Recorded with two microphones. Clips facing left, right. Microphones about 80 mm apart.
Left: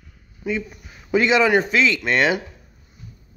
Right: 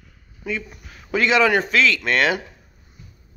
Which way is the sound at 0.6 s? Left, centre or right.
Centre.